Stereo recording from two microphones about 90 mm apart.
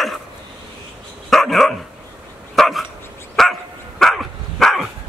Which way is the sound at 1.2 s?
5° left (ahead or behind).